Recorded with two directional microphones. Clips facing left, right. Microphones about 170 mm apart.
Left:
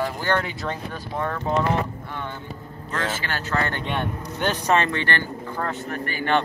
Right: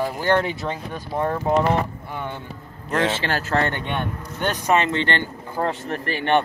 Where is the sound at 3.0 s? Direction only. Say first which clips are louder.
Right 5 dB; 30° right (ahead or behind).